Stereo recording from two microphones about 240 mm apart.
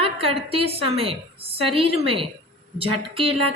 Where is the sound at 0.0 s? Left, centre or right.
Right.